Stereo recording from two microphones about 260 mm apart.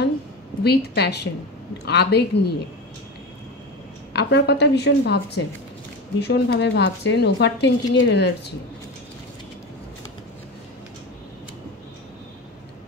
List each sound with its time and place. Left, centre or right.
0.7 s speech: left
4.1 s speech: left